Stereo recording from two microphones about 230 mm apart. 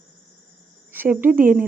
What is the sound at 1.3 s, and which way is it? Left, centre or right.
Speech, right.